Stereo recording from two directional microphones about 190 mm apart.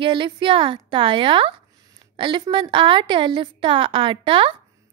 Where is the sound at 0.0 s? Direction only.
25° right (ahead or behind).